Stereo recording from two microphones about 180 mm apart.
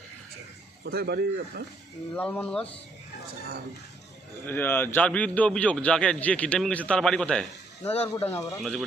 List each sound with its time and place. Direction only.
0.9 s speech: 60° right (ahead or behind)
2.1 s a man's voice: 10° left (ahead or behind)
4.4 s a man's voice: 10° left (ahead or behind)